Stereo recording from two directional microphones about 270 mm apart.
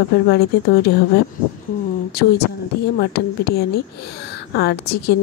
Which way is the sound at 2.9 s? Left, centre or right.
Left.